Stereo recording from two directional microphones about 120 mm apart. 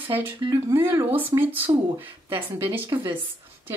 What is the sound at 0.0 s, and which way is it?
Speech, 15° right (ahead or behind).